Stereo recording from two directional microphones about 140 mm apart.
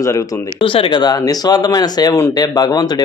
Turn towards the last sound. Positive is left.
turn(degrees=30)  # may be behind; listen again after turning